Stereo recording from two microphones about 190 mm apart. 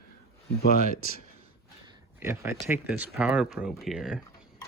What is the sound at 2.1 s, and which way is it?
Speech, 10° right (ahead or behind).